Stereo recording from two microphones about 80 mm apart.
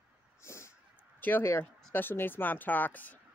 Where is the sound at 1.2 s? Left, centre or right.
Left.